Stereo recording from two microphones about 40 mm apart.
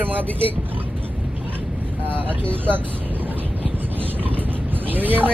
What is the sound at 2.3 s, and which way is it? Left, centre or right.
Speech, left.